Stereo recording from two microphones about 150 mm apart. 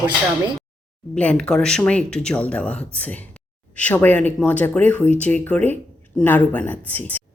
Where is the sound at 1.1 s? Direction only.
5° left (ahead or behind).